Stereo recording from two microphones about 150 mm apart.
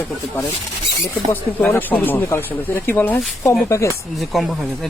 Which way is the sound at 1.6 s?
10° left (ahead or behind).